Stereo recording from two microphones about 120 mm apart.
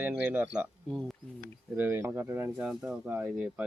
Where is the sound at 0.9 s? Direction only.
5° left (ahead or behind).